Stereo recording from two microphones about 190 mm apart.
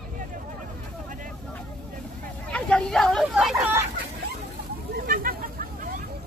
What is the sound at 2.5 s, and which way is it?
Hubbub, 5° left (ahead or behind).